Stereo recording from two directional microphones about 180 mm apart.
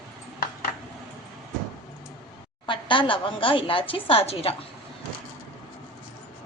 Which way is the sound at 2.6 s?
25° left (ahead or behind).